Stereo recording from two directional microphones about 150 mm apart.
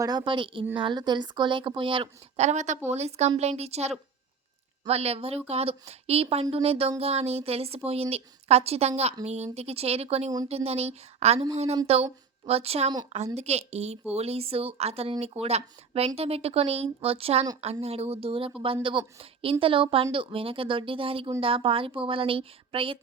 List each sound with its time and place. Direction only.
0.0 s a woman's voice: 25° right (ahead or behind)
2.4 s a woman's voice: 50° right (ahead or behind)